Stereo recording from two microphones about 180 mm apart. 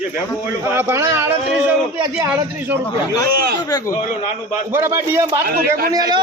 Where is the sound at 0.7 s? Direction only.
15° right (ahead or behind).